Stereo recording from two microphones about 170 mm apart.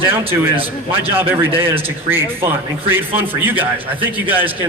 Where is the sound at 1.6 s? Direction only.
15° right (ahead or behind).